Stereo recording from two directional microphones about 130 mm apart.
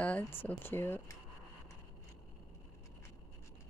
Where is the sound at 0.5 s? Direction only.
15° left (ahead or behind).